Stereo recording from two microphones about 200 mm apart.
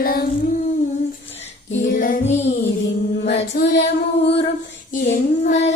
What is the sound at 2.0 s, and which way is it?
Child singing, 45° left (ahead or behind).